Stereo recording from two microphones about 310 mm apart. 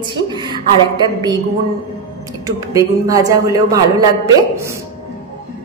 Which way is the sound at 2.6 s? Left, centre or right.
Centre.